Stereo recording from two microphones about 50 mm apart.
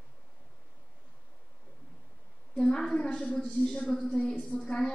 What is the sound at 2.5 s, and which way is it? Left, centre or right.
A woman's voice, centre.